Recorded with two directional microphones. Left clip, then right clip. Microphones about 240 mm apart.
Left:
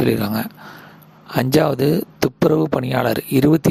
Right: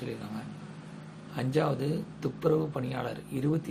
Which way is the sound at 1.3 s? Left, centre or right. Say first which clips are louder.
Left 13 dB; left.